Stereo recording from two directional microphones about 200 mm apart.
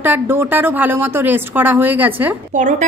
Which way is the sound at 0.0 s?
10° right (ahead or behind).